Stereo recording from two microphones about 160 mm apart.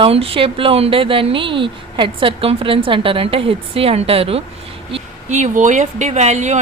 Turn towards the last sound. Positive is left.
turn(degrees=-45)  # may be behind; listen again after turning